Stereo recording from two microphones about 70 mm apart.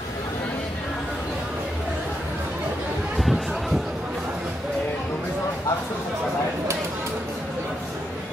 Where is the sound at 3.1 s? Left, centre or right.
Centre.